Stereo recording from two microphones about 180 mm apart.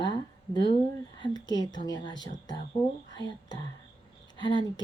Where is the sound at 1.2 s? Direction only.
25° left (ahead or behind).